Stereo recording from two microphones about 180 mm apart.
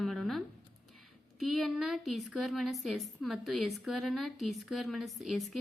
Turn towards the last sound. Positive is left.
turn(degrees=0)  # may be behind; listen again after turning